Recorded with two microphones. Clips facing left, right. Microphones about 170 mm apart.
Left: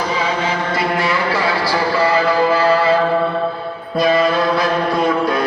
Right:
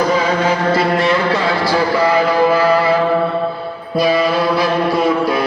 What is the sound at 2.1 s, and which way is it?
Music, 15° right (ahead or behind).